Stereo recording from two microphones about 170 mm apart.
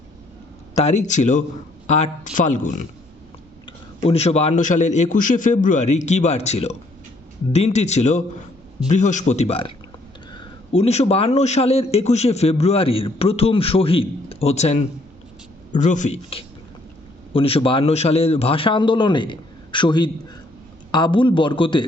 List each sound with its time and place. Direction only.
0.8 s a man's voice: 40° left (ahead or behind)
3.7 s a man's voice: 35° left (ahead or behind)